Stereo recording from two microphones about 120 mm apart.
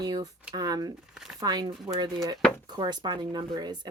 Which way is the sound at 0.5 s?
30° right (ahead or behind).